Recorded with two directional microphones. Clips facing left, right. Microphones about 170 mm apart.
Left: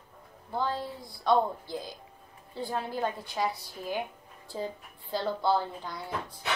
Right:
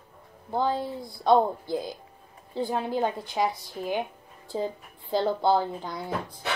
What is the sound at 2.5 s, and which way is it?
A woman's voice, 20° right (ahead or behind).